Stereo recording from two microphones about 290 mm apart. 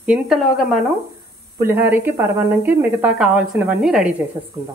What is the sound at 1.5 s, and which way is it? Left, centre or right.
Speech, centre.